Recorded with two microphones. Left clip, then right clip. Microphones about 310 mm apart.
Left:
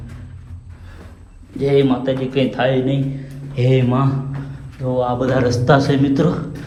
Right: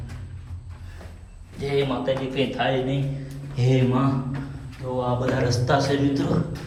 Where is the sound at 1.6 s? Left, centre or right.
Centre.